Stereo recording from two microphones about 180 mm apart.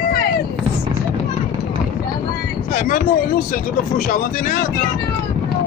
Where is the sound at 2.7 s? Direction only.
45° left (ahead or behind).